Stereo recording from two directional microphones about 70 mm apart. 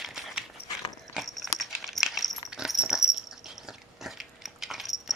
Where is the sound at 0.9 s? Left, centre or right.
Centre.